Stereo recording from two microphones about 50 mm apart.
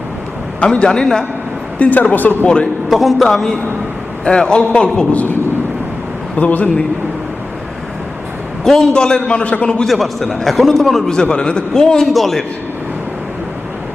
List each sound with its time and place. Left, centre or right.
0.6 s a man's voice: centre
1.8 s speech: left
2.9 s a man's voice: centre
3.2 s a man's voice: centre
6.3 s a man's voice: left
8.6 s a man's voice: centre; by 9.6 s left
9.8 s a man's voice: centre
11.1 s a man's voice: centre
12.0 s a man's voice: centre